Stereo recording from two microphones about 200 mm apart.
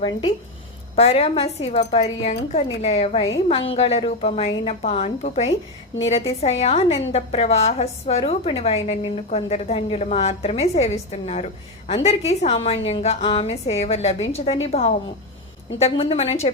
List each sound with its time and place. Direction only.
0.0 s a woman's voice: 25° left (ahead or behind)